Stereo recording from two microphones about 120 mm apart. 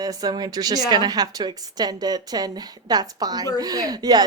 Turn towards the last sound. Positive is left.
turn(degrees=-35)  # may be behind; listen again after turning